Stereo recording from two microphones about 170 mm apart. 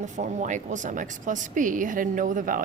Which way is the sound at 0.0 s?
45° right (ahead or behind).